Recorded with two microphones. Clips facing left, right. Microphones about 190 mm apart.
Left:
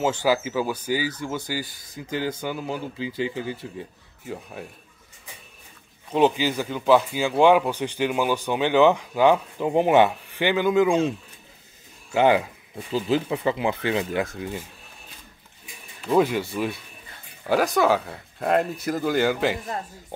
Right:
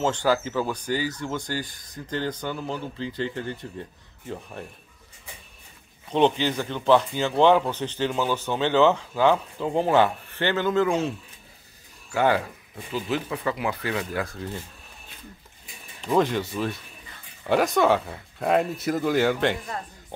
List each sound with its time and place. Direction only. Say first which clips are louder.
0.0 s speech: left 1 dB; 5° left (ahead or behind)
6.1 s speech: left 1 dB; 5° left (ahead or behind)
16.1 s speech: left 2 dB; 10° left (ahead or behind)